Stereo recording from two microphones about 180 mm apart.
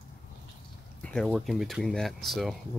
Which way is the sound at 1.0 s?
5° left (ahead or behind).